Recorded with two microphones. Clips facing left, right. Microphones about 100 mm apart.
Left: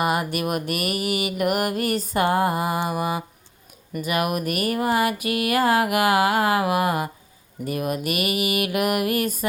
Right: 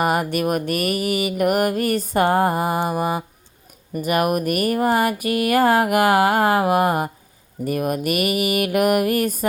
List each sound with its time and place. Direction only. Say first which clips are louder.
0.0 s mantra: right 3 dB; 45° right (ahead or behind)